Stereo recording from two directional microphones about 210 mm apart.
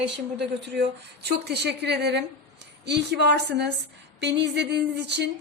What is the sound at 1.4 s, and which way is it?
Speech, 50° right (ahead or behind).